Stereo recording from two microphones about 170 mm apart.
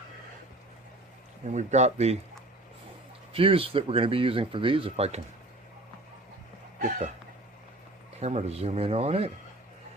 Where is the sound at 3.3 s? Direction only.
35° right (ahead or behind).